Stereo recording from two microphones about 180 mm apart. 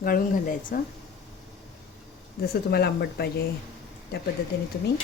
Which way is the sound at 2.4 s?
60° left (ahead or behind).